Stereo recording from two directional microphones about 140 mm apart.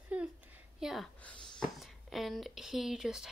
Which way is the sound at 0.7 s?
Centre (ahead or behind).